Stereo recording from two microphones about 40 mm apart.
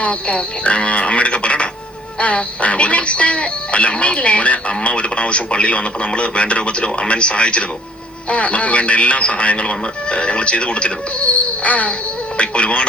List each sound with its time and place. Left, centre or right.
0.0 s speech: left